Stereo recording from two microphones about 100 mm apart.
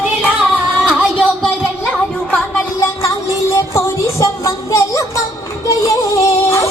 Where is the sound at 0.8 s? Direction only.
15° right (ahead or behind).